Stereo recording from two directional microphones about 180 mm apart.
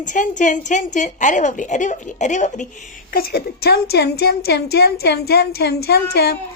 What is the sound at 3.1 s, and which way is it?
A woman's voice, 60° left (ahead or behind).